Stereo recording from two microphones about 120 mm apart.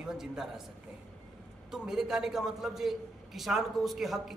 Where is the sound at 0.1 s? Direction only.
5° right (ahead or behind).